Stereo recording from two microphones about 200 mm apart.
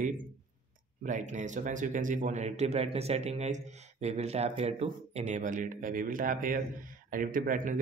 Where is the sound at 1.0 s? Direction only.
40° right (ahead or behind).